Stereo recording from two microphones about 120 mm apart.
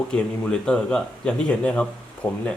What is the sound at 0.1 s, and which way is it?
Speech, 10° left (ahead or behind).